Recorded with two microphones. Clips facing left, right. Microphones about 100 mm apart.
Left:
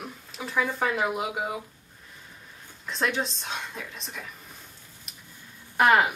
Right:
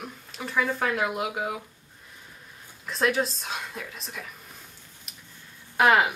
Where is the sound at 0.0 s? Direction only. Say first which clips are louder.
Even; centre (ahead or behind).